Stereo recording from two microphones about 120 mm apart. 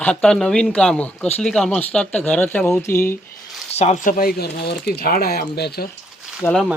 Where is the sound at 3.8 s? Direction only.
80° left.